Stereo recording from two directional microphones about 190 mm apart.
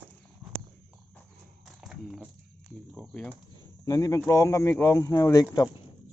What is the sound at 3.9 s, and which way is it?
Speech, 15° left (ahead or behind).